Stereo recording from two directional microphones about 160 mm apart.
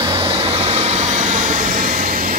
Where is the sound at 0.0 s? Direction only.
35° right (ahead or behind).